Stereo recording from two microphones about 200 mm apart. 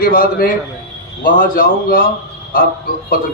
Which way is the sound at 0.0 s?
45° left (ahead or behind).